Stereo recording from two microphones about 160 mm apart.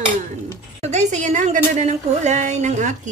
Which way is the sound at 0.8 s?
45° right (ahead or behind).